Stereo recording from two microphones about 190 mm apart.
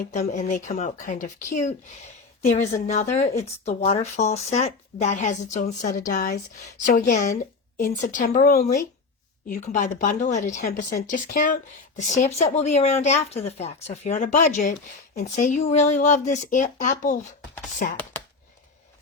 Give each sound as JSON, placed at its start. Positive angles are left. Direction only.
{"t": 0.0, "sound": "a woman's voice", "side_deg": 40}
{"t": 6.1, "sound": "speech", "side_deg": 50}